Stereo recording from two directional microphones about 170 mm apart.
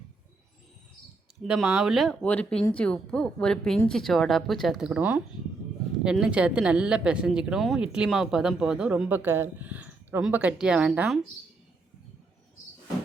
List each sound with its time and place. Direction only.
1.5 s speech: 5° right (ahead or behind)